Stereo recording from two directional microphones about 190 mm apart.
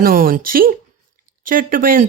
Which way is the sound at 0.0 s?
50° right (ahead or behind).